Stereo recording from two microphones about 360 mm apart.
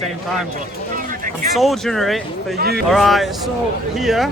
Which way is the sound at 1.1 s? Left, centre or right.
Right.